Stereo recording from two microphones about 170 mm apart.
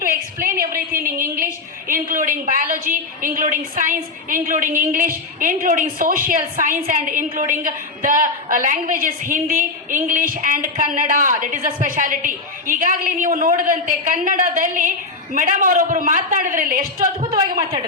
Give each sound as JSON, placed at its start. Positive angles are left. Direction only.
{"t": 0.0, "sound": "a woman's voice", "side_deg": -55}
{"t": 17.3, "sound": "a woman's voice", "side_deg": -30}